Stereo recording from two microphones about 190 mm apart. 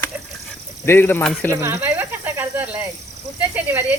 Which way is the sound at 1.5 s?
15° right (ahead or behind).